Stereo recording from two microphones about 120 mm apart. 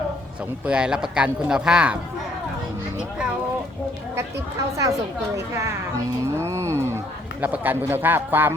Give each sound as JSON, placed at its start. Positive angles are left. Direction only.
{"t": 0.6, "sound": "speech", "side_deg": -10}
{"t": 6.3, "sound": "a sound", "side_deg": -25}
{"t": 7.4, "sound": "speech", "side_deg": -15}